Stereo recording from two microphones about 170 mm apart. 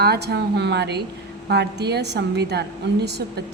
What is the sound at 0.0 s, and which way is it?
A woman's voice, 75° right (ahead or behind).